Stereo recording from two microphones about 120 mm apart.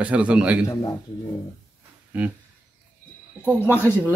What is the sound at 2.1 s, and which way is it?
Speech, 15° right (ahead or behind).